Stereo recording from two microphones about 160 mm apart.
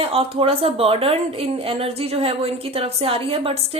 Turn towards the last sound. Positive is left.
turn(degrees=-35)  # may be behind; listen again after turning